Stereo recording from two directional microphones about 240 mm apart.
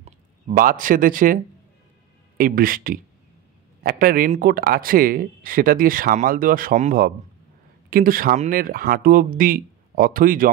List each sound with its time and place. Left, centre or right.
0.0 s speech: right